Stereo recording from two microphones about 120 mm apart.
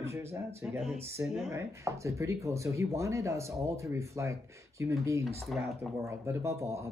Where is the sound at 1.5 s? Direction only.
25° right (ahead or behind).